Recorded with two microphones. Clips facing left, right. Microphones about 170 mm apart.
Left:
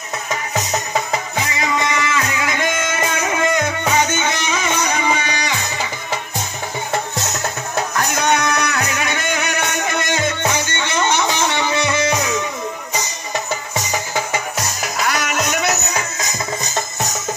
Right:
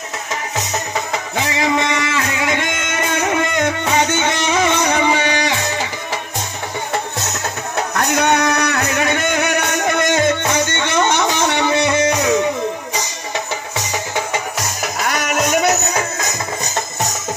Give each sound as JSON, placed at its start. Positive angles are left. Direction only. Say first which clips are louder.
{"t": 1.3, "sound": "a sound", "louder": "right 7 dB", "side_deg": -70}
{"t": 3.5, "sound": "music", "louder": "right 1 dB", "side_deg": -65}
{"t": 7.9, "sound": "music", "louder": "right 3 dB", "side_deg": -60}
{"t": 15.0, "sound": "music", "louder": "right 2 dB", "side_deg": -50}